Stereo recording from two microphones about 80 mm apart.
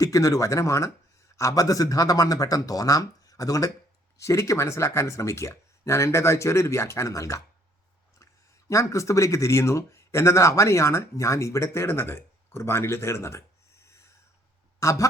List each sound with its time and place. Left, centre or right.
0.0 s speech: left
8.7 s speech: left